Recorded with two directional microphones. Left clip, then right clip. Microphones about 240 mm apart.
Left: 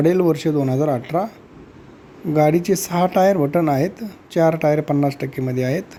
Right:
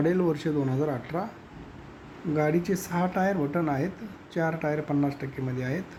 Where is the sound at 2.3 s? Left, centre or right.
Left.